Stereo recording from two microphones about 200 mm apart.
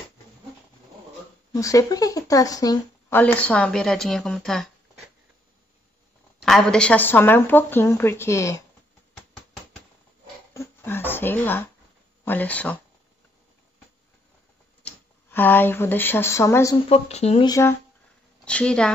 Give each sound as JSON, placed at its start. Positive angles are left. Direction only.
{"t": 1.5, "sound": "speech", "side_deg": 15}
{"t": 6.4, "sound": "speech", "side_deg": 5}
{"t": 10.5, "sound": "a sound", "side_deg": 15}
{"t": 12.3, "sound": "speech", "side_deg": 10}
{"t": 14.8, "sound": "speech", "side_deg": 10}
{"t": 16.9, "sound": "speech", "side_deg": 30}
{"t": 17.5, "sound": "speech", "side_deg": 15}